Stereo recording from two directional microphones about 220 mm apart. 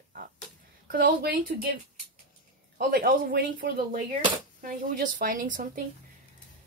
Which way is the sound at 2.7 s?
40° right (ahead or behind).